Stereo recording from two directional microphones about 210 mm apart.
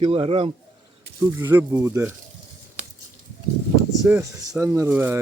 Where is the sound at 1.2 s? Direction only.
15° right (ahead or behind).